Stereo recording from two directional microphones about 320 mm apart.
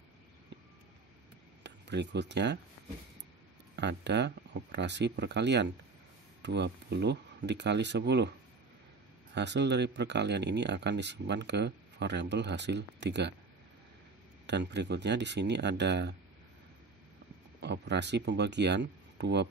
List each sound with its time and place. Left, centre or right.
1.6 s speech: right
3.7 s speech: right
9.3 s speech: right
14.4 s speech: right
17.6 s speech: right